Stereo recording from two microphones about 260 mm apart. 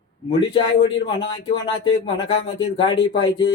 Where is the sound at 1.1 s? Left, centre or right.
Left.